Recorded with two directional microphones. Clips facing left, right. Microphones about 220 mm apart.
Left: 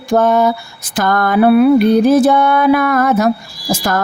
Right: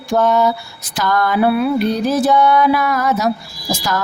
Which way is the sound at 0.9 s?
50° left (ahead or behind).